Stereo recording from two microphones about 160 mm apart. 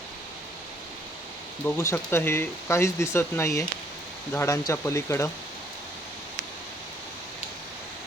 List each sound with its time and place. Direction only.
1.6 s speech: 15° left (ahead or behind)